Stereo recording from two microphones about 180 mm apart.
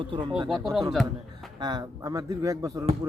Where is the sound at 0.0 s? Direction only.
25° right (ahead or behind).